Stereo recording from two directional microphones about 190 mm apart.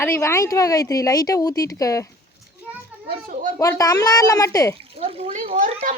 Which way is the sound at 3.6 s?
20° left (ahead or behind).